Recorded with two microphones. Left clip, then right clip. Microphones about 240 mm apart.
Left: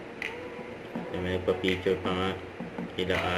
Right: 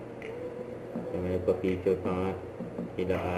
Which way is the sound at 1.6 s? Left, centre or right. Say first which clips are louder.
Left 1 dB; centre.